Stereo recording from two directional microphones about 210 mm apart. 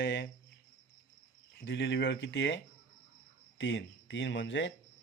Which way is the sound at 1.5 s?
60° left (ahead or behind).